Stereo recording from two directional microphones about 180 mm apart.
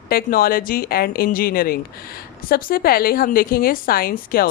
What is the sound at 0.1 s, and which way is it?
A woman's voice, 55° left (ahead or behind).